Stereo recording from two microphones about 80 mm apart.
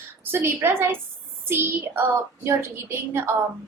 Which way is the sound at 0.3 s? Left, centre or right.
Right.